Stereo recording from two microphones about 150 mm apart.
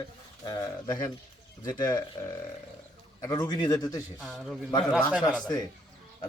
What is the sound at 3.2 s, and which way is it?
Speech, 30° left (ahead or behind).